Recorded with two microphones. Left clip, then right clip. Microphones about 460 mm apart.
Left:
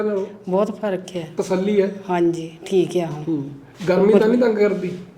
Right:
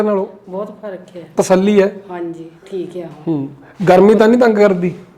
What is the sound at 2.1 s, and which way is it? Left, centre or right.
A woman's voice, left.